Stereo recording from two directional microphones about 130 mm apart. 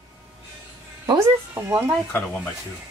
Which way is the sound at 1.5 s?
15° right (ahead or behind).